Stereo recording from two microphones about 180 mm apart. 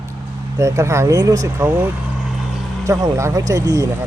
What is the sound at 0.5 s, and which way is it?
Speech, 15° right (ahead or behind).